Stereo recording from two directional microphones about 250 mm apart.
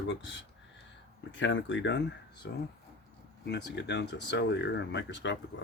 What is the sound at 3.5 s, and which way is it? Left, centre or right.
Speech, left.